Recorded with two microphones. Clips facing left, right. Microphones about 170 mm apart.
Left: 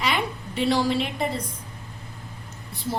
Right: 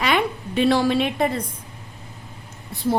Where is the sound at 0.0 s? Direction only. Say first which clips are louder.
Right 5 dB; 55° right (ahead or behind).